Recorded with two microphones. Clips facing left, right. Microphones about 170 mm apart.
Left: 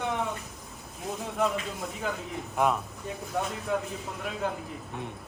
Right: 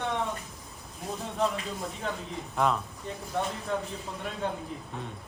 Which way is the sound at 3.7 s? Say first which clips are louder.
Left 2 dB; 5° left (ahead or behind).